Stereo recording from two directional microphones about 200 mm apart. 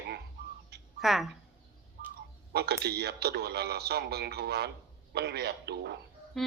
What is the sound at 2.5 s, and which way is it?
A man's voice, 55° right (ahead or behind).